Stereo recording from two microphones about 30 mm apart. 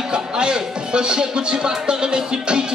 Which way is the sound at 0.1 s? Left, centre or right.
Right.